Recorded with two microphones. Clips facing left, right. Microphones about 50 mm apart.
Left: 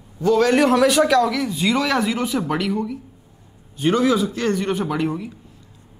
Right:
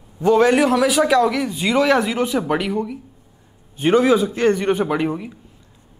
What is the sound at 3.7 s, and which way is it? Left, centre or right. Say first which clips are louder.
A man's voice: right 3 dB; right.